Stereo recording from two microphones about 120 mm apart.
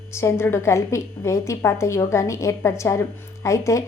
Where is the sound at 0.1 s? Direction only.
25° left (ahead or behind).